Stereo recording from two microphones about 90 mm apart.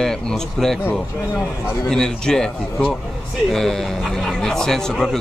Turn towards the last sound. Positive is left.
turn(degrees=5)  # may be behind; listen again after turning